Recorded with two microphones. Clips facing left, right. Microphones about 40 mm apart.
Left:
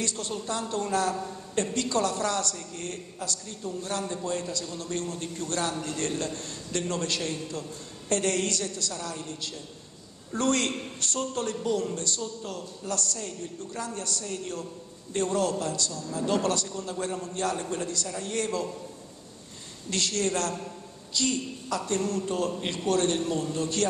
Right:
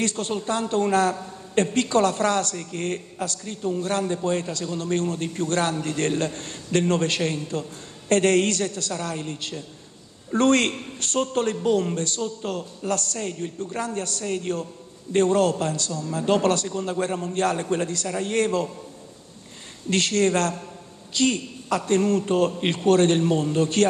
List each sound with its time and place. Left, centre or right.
0.0 s a man's voice: right
19.9 s a man's voice: right